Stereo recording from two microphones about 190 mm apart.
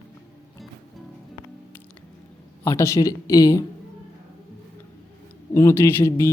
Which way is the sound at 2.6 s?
15° left (ahead or behind).